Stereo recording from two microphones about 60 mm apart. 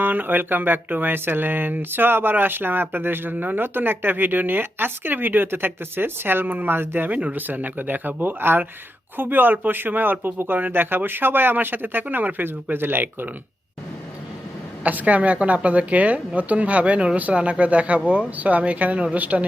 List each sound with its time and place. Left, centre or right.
0.0 s speech: right
14.8 s a woman's voice: right